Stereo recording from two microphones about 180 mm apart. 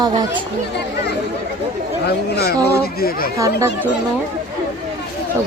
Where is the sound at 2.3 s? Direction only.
60° left (ahead or behind).